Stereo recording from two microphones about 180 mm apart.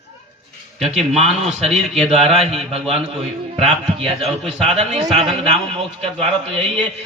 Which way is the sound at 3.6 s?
35° right (ahead or behind).